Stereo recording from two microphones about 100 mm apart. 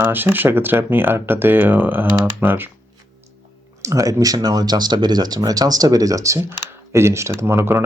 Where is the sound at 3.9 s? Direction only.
35° right (ahead or behind).